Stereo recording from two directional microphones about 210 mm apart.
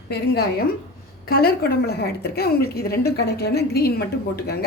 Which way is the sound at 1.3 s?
45° left (ahead or behind).